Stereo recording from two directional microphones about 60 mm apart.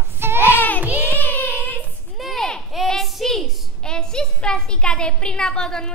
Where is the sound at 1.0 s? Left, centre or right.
Left.